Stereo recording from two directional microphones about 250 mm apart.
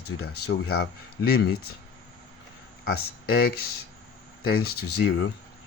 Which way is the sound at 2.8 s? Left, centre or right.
Left.